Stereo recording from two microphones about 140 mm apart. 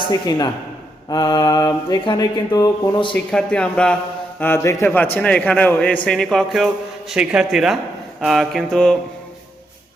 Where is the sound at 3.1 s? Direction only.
10° left (ahead or behind).